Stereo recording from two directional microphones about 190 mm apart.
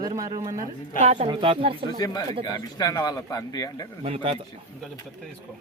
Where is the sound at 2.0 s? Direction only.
20° left (ahead or behind).